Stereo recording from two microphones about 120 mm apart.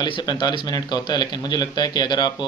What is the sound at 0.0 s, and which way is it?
Speech, 35° left (ahead or behind).